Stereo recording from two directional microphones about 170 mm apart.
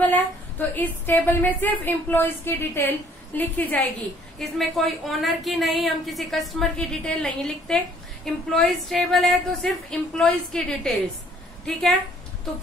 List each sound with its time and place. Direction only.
0.0 s a woman's voice: 10° left (ahead or behind)